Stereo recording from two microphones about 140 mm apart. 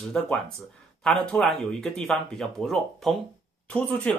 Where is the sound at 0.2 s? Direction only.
5° left (ahead or behind).